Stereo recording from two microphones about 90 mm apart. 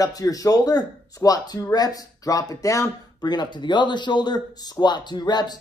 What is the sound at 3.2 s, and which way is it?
Speech, 55° left (ahead or behind).